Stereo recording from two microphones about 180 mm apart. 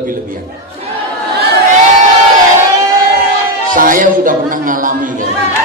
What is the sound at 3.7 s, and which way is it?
A man's voice, 50° right (ahead or behind).